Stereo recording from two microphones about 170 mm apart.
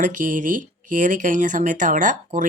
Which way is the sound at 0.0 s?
50° right (ahead or behind).